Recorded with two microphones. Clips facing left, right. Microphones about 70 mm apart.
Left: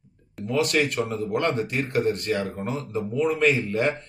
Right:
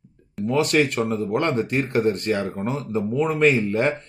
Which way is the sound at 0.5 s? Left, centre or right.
Right.